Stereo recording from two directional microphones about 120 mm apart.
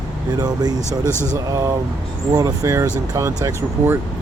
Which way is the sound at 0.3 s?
35° right (ahead or behind).